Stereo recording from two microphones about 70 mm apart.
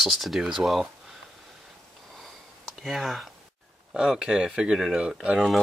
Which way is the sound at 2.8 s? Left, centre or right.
Centre.